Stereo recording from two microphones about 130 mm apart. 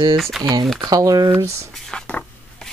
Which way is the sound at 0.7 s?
30° right (ahead or behind).